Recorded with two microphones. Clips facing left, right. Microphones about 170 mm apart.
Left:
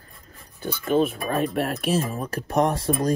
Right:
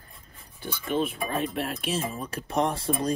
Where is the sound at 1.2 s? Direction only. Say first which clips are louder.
Left 5 dB; 55° left (ahead or behind).